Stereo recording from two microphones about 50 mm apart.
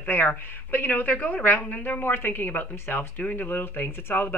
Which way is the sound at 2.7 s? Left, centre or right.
Left.